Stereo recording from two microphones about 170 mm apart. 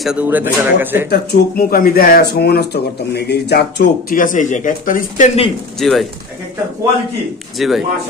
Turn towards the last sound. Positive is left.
turn(degrees=0)  # may be behind; listen again after turning